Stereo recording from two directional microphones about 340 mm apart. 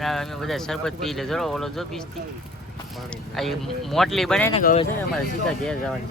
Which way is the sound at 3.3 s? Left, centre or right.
Centre.